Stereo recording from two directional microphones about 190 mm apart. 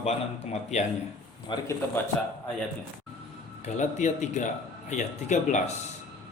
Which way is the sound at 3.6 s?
40° left (ahead or behind).